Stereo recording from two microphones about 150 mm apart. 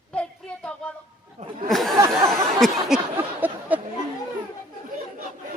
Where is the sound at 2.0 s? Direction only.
20° right (ahead or behind).